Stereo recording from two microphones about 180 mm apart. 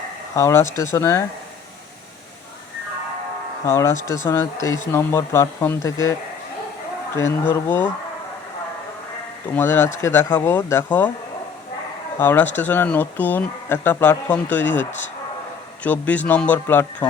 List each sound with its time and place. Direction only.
0.3 s speech: 15° left (ahead or behind)
3.7 s speech: 15° left (ahead or behind)
7.2 s speech: 15° left (ahead or behind)
9.6 s speech: 10° left (ahead or behind)
12.2 s speech: 10° left (ahead or behind)